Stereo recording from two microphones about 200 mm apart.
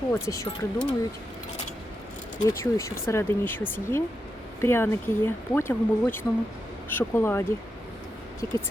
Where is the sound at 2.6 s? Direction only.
15° left (ahead or behind).